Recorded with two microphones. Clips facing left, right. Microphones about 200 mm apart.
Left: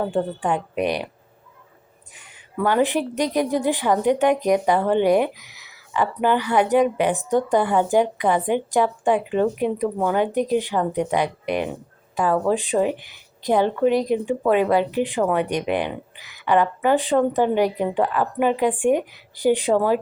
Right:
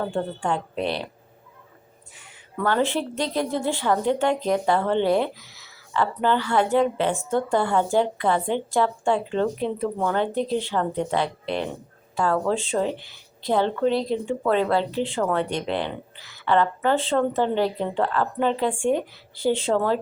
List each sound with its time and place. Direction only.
0.0 s a woman's voice: 15° left (ahead or behind)
2.1 s a woman's voice: 15° left (ahead or behind)